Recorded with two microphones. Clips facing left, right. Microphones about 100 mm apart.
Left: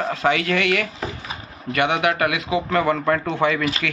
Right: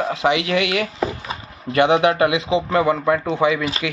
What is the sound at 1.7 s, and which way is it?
A man's voice, 30° right (ahead or behind).